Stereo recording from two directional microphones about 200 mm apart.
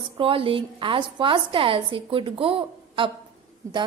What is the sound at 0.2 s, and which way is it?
A woman's voice, 25° right (ahead or behind).